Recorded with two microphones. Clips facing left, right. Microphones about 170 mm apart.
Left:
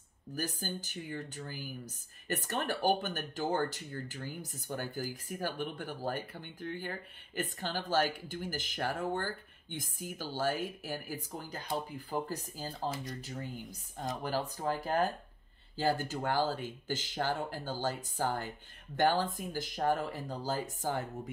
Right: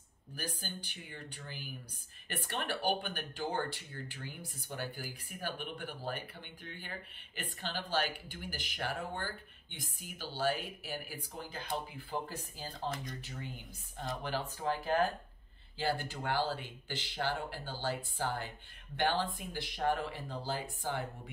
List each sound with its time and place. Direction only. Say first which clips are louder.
0.4 s speech: left 5 dB; 45° left (ahead or behind)
14.2 s speech: left 2 dB; 40° left (ahead or behind)